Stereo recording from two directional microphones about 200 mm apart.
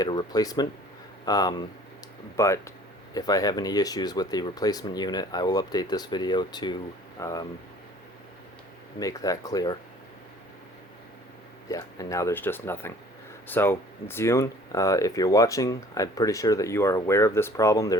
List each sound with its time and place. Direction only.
0.0 s speech: 20° left (ahead or behind)
9.0 s speech: 15° left (ahead or behind)
11.7 s speech: 15° left (ahead or behind)